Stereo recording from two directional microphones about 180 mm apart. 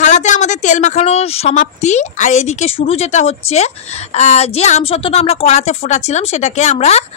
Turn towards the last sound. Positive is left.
turn(degrees=40)  # may be behind; listen again after turning